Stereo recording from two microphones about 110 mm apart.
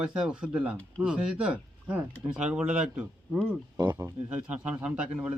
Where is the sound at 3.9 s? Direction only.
20° right (ahead or behind).